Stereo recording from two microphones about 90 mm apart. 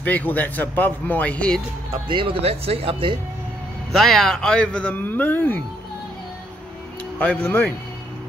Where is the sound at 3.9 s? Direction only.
Centre (ahead or behind); by 5.6 s 20° left (ahead or behind).